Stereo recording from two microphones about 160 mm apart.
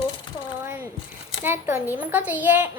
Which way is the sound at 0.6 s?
15° right (ahead or behind).